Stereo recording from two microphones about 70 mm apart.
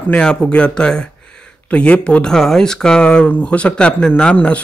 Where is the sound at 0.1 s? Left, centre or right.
Centre.